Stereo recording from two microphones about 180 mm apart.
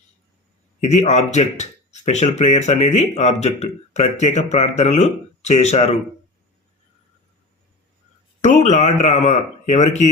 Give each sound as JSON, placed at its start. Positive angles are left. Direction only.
{"t": 0.8, "sound": "speech", "side_deg": 40}
{"t": 8.4, "sound": "a man's voice", "side_deg": 40}